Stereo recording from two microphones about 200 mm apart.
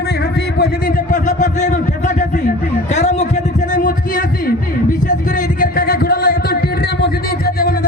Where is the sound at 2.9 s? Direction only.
35° left (ahead or behind); by 6.6 s 50° left (ahead or behind).